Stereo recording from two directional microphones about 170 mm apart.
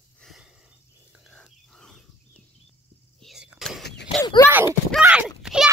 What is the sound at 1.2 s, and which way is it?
Pig, centre (ahead or behind).